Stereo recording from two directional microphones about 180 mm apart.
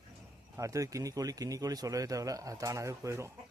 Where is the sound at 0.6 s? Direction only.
20° right (ahead or behind).